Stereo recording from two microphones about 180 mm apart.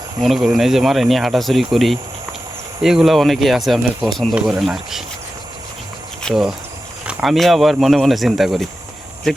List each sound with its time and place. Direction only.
0.2 s speech: centre (ahead or behind)
6.2 s speech: centre (ahead or behind)